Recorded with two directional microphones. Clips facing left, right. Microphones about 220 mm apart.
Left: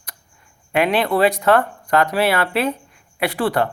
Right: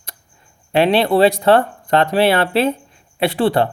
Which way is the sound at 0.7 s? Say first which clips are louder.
Right 4 dB; 30° right (ahead or behind).